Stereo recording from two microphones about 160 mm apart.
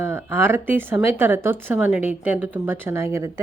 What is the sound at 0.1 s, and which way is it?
Speech, 15° right (ahead or behind).